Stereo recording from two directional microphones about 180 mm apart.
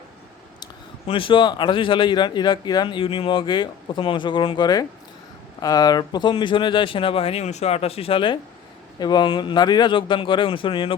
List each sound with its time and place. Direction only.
0.6 s a man's voice: 30° left (ahead or behind)